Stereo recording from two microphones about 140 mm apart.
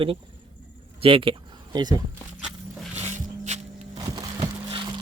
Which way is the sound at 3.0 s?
55° right (ahead or behind).